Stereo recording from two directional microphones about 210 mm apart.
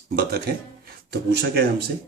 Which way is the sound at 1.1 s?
50° right (ahead or behind).